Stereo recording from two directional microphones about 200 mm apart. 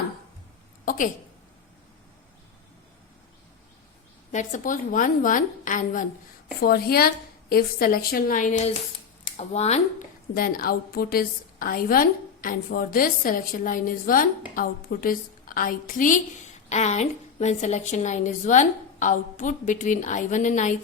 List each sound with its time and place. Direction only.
0.9 s a sound: 40° left (ahead or behind)
4.3 s a woman's voice: 35° left (ahead or behind)
10.3 s a woman's voice: 45° left (ahead or behind)